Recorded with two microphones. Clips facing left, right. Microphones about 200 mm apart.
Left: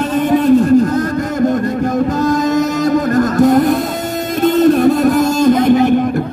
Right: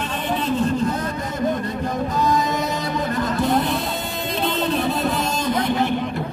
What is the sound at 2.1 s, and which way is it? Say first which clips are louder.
Music: left 7 dB; 45° left (ahead or behind).